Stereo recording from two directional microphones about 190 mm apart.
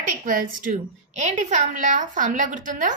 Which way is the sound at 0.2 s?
45° right (ahead or behind).